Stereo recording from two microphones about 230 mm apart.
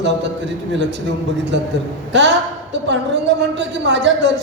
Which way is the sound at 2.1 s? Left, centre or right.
Right.